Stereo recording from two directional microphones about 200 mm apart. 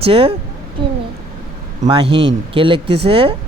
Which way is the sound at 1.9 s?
25° right (ahead or behind).